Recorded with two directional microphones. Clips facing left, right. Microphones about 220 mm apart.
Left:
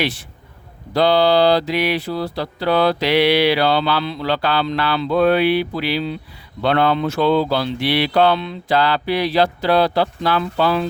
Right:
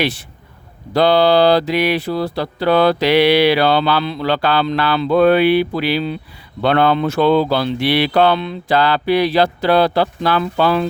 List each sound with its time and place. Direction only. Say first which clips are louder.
0.9 s mantra: right 2 dB; 55° right (ahead or behind)